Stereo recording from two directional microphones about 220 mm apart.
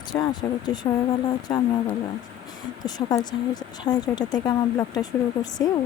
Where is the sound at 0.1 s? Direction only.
20° left (ahead or behind).